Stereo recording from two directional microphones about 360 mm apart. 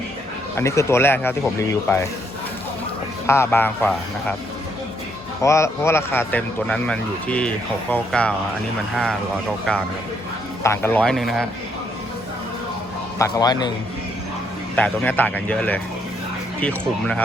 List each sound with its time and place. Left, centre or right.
0.5 s speech: centre
3.2 s speech: centre
5.4 s speech: centre
10.6 s speech: centre
13.1 s speech: centre
14.8 s speech: centre